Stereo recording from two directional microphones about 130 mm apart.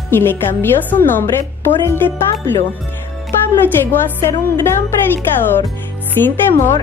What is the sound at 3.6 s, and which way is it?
A woman's voice, 15° left (ahead or behind).